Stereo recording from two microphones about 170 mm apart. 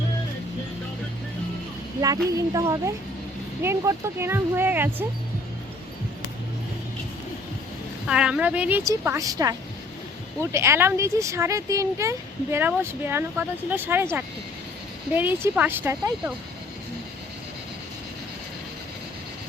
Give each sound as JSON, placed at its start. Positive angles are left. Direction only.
{"t": 2.0, "sound": "speech", "side_deg": -20}
{"t": 8.0, "sound": "speech", "side_deg": -5}